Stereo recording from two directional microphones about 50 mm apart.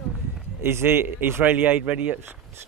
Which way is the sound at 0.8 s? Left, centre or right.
Right.